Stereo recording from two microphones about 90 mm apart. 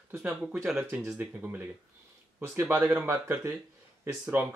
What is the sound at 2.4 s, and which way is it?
Speech, 30° right (ahead or behind).